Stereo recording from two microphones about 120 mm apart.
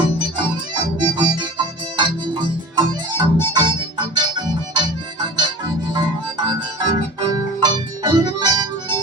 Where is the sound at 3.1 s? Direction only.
35° right (ahead or behind).